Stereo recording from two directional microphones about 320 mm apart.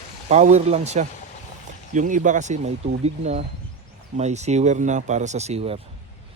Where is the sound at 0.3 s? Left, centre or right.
Right.